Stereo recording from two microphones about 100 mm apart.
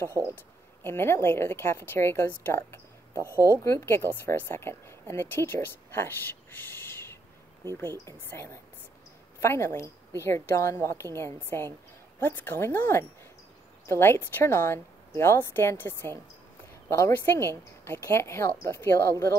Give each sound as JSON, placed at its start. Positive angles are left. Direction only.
{"t": 0.1, "sound": "speech", "side_deg": -30}
{"t": 0.8, "sound": "a woman's voice", "side_deg": 25}
{"t": 9.4, "sound": "a woman's voice", "side_deg": 25}